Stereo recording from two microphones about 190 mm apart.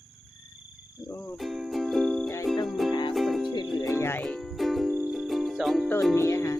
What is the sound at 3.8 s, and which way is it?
Music, 15° left (ahead or behind).